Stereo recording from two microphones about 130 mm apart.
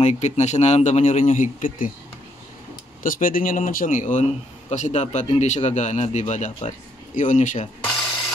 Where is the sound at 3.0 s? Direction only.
90° left; by 6.7 s 65° left (ahead or behind).